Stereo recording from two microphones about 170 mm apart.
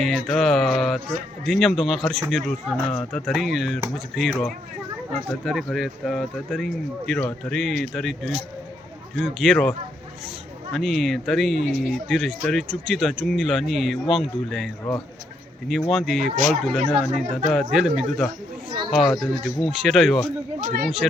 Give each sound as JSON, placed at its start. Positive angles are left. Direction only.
{"t": 0.3, "sound": "speech", "side_deg": 0}
{"t": 9.1, "sound": "speech", "side_deg": 0}
{"t": 15.9, "sound": "speech", "side_deg": 0}
{"t": 20.6, "sound": "speech", "side_deg": -50}
{"t": 21.0, "sound": "speech", "side_deg": 5}